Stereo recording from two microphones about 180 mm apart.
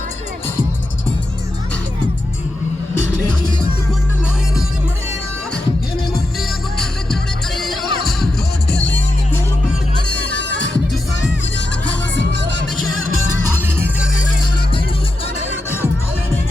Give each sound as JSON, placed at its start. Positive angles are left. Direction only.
{"t": 6.7, "sound": "music", "side_deg": 0}
{"t": 8.7, "sound": "music", "side_deg": 85}
{"t": 12.3, "sound": "music", "side_deg": -75}